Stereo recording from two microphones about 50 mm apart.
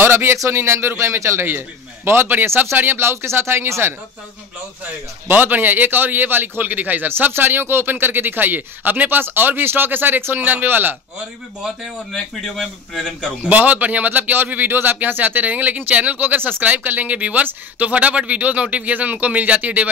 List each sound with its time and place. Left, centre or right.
0.0 s a sound: right
0.5 s speech: right
0.9 s speech: right
2.0 s speech: right
5.3 s a man's voice: right
12.1 s a man's voice: centre
13.5 s a man's voice: right